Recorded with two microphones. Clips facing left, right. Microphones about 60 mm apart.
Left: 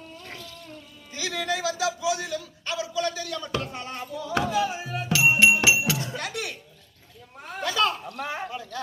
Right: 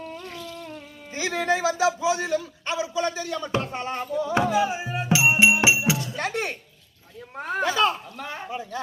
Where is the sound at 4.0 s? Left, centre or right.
Right.